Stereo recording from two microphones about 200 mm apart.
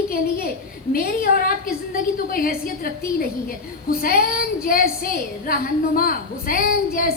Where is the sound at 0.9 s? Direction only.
50° left (ahead or behind).